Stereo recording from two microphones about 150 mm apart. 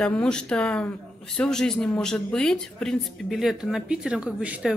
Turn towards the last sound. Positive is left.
turn(degrees=-10)  # may be behind; listen again after turning